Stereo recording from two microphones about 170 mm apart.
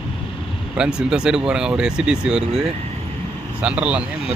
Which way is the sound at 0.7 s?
5° right (ahead or behind).